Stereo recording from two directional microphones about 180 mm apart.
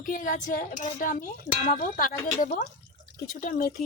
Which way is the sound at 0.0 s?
50° left (ahead or behind).